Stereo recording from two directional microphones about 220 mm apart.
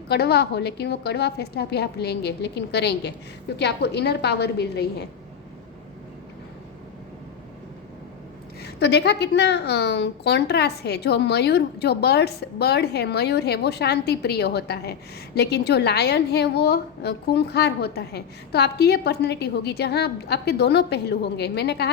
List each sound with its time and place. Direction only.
0.1 s a woman's voice: 45° left (ahead or behind)
8.6 s a woman's voice: 50° left (ahead or behind)